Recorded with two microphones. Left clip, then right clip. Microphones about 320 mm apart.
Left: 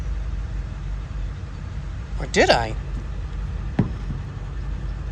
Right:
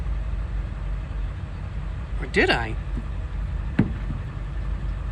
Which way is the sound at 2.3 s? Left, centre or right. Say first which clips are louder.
Left 4 dB; centre.